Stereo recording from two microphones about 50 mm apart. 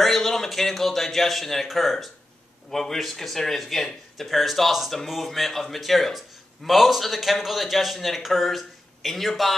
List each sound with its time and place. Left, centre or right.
0.0 s a man's voice: centre